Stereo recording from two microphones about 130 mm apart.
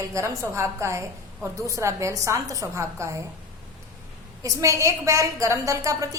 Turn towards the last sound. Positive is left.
turn(degrees=-25)  # may be behind; listen again after turning